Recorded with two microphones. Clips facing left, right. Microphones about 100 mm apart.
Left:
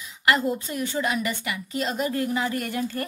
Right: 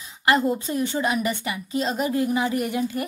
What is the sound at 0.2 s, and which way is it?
A woman's voice, 25° right (ahead or behind).